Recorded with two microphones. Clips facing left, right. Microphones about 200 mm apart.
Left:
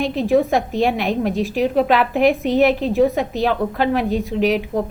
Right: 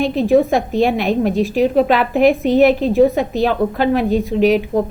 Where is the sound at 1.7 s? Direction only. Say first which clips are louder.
Right 2 dB; 35° right (ahead or behind).